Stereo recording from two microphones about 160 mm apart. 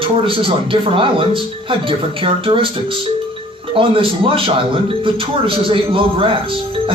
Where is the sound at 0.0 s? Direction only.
35° right (ahead or behind).